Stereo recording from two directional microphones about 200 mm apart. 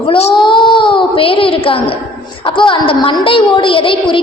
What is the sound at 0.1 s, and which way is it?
A child's voice, 30° left (ahead or behind).